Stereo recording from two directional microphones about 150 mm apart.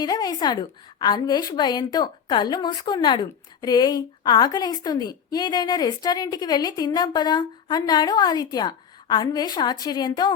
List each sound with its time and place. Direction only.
0.0 s a woman's voice: 25° left (ahead or behind)